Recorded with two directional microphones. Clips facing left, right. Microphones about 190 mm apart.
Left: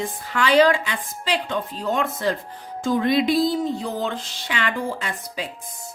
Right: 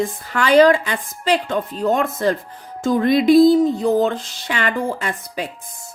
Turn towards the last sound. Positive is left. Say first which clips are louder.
# right 4 dB
turn(degrees=-50)  # may be behind; listen again after turning